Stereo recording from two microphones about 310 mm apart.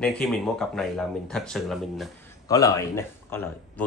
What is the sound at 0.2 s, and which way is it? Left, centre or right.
Speech, centre.